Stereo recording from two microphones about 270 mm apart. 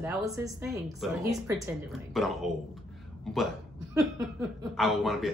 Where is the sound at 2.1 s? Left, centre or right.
Centre.